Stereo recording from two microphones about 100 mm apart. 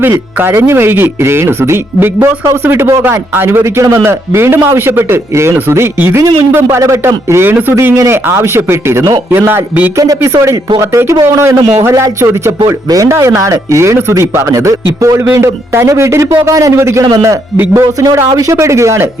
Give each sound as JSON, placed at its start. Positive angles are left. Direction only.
{"t": 0.0, "sound": "speech", "side_deg": -20}
{"t": 10.0, "sound": "speech", "side_deg": -30}